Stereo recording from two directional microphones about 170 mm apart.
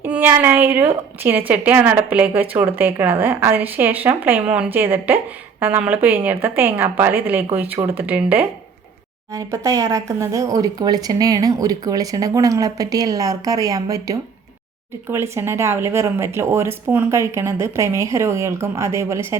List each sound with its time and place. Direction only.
0.0 s a woman's voice: 10° right (ahead or behind)
9.3 s a woman's voice: 20° right (ahead or behind)